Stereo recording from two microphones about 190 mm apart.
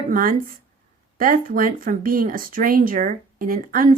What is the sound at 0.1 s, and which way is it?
Speech, 45° right (ahead or behind).